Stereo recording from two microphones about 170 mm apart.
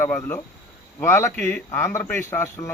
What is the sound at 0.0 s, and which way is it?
Speech, 15° left (ahead or behind).